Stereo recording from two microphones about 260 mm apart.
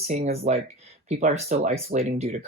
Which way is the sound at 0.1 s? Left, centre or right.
Right.